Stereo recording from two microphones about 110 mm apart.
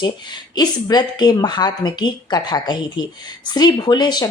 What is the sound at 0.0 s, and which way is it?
A woman's voice, 40° left (ahead or behind).